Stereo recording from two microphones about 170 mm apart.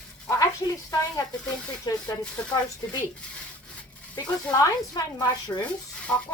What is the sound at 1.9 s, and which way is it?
Speech, 25° left (ahead or behind).